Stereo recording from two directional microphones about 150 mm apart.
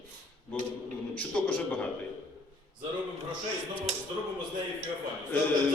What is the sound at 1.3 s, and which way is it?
Speech, 10° left (ahead or behind).